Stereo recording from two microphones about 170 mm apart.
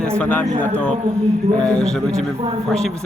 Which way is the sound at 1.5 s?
5° left (ahead or behind).